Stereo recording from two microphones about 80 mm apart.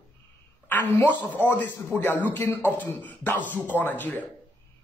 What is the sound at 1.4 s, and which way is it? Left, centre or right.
Speech, left.